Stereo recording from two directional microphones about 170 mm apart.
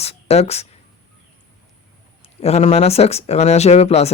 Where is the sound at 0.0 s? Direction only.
35° left (ahead or behind).